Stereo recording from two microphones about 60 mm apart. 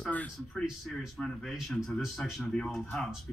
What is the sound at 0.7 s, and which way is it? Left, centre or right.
Speech, centre.